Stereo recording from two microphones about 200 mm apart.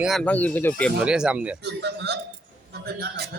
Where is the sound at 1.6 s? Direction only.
55° right (ahead or behind).